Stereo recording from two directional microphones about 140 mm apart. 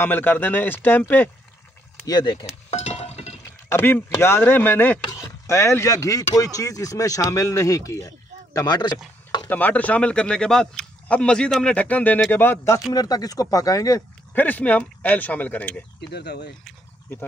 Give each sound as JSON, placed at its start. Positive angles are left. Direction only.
{"t": 0.0, "sound": "speech", "side_deg": 15}
{"t": 2.0, "sound": "speech", "side_deg": 30}
{"t": 2.7, "sound": "a sound", "side_deg": 50}
{"t": 3.6, "sound": "speech", "side_deg": 15}
{"t": 5.0, "sound": "speech", "side_deg": 25}
{"t": 9.5, "sound": "speech", "side_deg": 10}
{"t": 14.3, "sound": "speech", "side_deg": 10}